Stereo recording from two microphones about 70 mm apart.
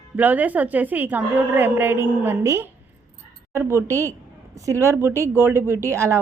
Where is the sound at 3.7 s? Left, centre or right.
Right.